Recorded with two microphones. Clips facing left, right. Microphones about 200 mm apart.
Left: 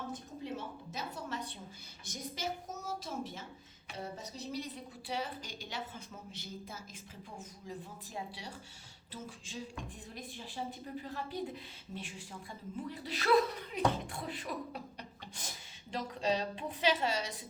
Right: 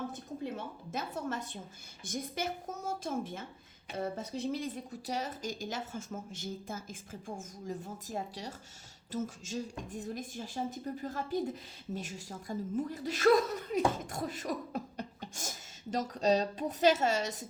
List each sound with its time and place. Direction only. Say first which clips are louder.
0.5 s a woman's voice: right 2 dB; 50° right (ahead or behind)
14.0 s beatboxing: right 4 dB; 45° right (ahead or behind)